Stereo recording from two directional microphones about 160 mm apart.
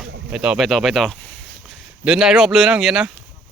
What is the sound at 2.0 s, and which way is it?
Speech, 5° right (ahead or behind).